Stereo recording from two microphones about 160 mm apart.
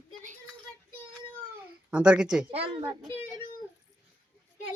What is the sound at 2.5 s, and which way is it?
Speech, 40° right (ahead or behind).